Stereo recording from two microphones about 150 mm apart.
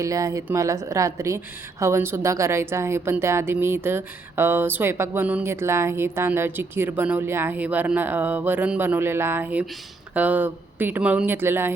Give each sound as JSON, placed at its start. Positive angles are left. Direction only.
{"t": 0.0, "sound": "a woman's voice", "side_deg": -20}